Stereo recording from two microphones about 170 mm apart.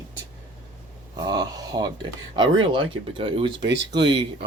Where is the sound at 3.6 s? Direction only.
90° right.